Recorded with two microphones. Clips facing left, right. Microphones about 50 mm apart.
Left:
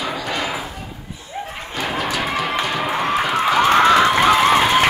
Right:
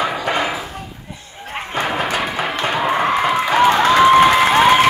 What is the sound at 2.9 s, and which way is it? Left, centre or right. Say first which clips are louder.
Music: even; right.